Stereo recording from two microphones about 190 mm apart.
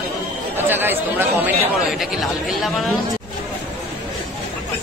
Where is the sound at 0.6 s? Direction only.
10° right (ahead or behind).